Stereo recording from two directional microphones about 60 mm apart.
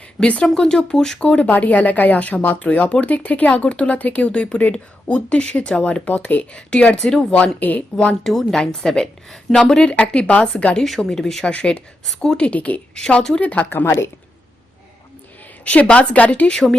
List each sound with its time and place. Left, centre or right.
0.2 s speech: centre
1.2 s speech: left
7.3 s speech: left
8.2 s speech: centre
10.8 s speech: centre
11.4 s speech: centre
12.9 s speech: centre
13.4 s speech: left
13.7 s a woman's voice: left
15.6 s speech: left